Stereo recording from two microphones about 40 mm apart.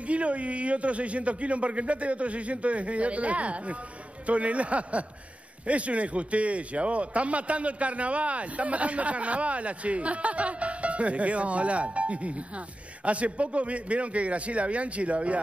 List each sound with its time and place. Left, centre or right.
0.0 s a man's voice: right